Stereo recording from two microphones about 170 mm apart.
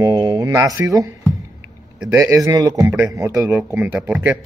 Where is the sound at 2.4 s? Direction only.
20° right (ahead or behind).